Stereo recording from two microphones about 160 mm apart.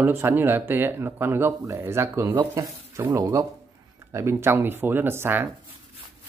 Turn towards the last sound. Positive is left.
turn(degrees=-15)  # may be behind; listen again after turning